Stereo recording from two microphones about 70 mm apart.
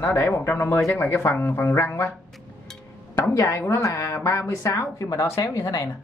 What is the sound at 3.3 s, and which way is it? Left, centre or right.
A woman's voice, left.